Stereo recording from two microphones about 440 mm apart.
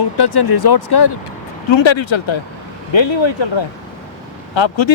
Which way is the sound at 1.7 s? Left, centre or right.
Left.